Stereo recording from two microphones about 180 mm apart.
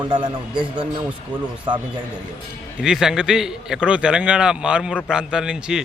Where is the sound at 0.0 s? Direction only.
25° right (ahead or behind).